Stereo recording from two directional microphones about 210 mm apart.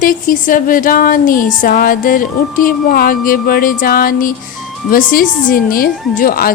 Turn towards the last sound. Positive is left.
turn(degrees=45)  # may be behind; listen again after turning